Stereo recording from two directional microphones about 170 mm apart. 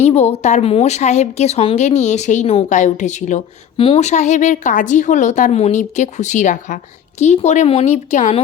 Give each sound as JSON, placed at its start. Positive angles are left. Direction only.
{"t": 0.0, "sound": "a woman's voice", "side_deg": 40}
{"t": 3.8, "sound": "a woman's voice", "side_deg": 35}